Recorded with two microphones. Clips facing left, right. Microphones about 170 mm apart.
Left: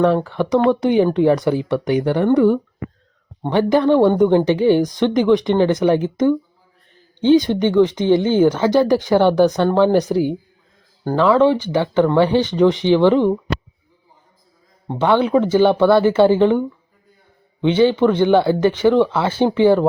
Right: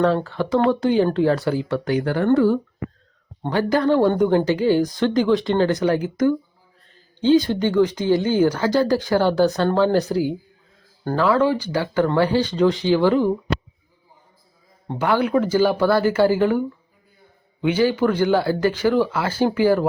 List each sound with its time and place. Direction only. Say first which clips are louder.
0.0 s speech: left 3 dB; 15° left (ahead or behind)
3.4 s speech: left 4 dB; 20° left (ahead or behind)
14.8 s speech: left 4 dB; 20° left (ahead or behind)
17.7 s speech: left 4 dB; 20° left (ahead or behind)